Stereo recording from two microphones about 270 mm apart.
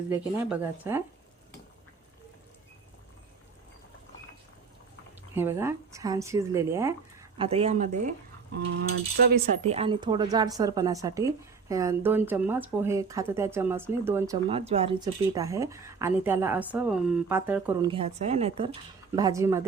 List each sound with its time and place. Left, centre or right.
0.1 s speech: centre
5.3 s speech: centre
7.3 s speech: right
8.5 s mechanisms: right
9.6 s speech: right
14.5 s speech: right; by 17.9 s centre
17.9 s speech: right